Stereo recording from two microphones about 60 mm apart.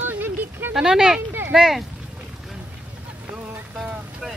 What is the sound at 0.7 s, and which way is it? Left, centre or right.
Speech, centre.